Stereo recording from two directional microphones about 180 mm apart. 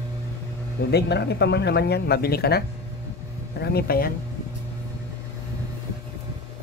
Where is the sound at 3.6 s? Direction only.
60° left (ahead or behind).